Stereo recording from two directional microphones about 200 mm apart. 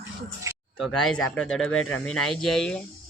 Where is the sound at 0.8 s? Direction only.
Centre (ahead or behind).